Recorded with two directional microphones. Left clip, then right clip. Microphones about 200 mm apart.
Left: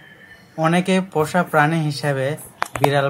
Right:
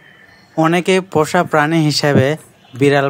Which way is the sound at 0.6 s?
45° right (ahead or behind).